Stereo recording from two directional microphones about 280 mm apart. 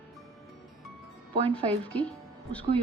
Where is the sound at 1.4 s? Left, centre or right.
Centre.